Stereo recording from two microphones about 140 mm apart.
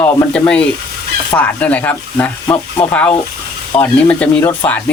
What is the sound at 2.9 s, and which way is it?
Speech, 10° left (ahead or behind).